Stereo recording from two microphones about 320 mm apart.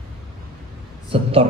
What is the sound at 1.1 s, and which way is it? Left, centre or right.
Speech, centre.